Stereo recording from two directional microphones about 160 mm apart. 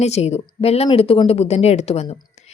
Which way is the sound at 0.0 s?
40° left (ahead or behind).